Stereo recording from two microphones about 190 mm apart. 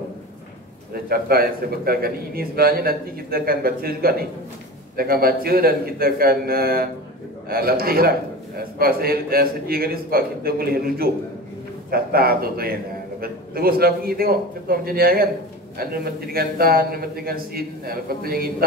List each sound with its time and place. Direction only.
1.0 s a man's voice: 50° right (ahead or behind)